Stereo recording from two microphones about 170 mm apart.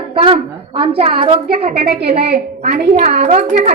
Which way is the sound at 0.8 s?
35° right (ahead or behind).